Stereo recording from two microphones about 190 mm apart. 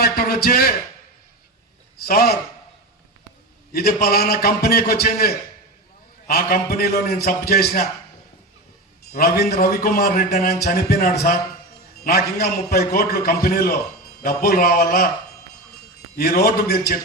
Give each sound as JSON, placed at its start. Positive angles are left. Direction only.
{"t": 0.0, "sound": "speech", "side_deg": 55}
{"t": 2.0, "sound": "a man's voice", "side_deg": 55}
{"t": 3.7, "sound": "a man's voice", "side_deg": 55}
{"t": 9.1, "sound": "a man's voice", "side_deg": 55}
{"t": 16.1, "sound": "a man's voice", "side_deg": 50}